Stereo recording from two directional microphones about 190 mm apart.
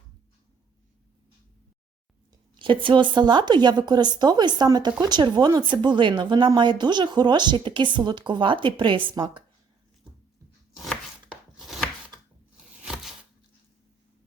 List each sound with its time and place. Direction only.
2.6 s a woman's voice: 25° right (ahead or behind)
10.8 s chopping: centre (ahead or behind)